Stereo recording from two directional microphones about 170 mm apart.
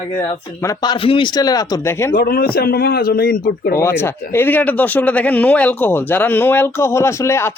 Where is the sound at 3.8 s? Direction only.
15° left (ahead or behind).